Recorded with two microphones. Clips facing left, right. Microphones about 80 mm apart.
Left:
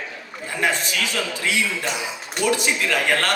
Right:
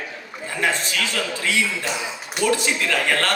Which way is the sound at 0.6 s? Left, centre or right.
Centre.